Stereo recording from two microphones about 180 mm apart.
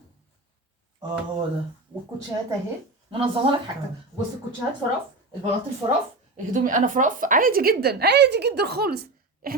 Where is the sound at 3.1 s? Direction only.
30° right (ahead or behind).